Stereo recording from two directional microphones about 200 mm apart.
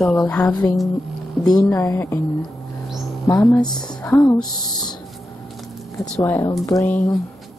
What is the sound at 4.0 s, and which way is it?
Speech, 10° left (ahead or behind).